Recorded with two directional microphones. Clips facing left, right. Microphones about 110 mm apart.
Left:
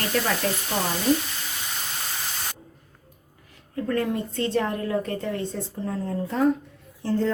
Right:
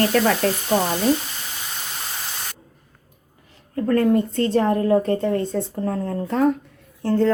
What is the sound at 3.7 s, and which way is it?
Speech, 45° right (ahead or behind).